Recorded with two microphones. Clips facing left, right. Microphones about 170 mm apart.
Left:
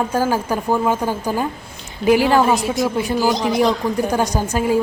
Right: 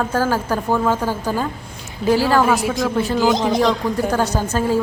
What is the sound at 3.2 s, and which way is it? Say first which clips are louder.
Speech: right 2 dB; 20° right (ahead or behind).